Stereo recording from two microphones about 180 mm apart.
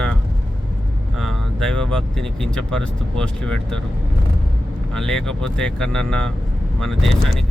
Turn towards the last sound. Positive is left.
turn(degrees=0)  # may be behind; listen again after turning